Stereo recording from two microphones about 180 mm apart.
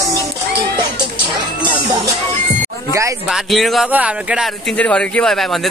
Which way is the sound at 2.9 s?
15° right (ahead or behind).